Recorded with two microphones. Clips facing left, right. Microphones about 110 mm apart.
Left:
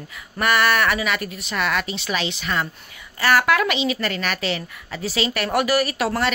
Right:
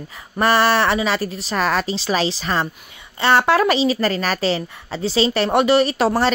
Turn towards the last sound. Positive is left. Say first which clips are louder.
# right 5 dB
turn(degrees=-30)  # may be behind; listen again after turning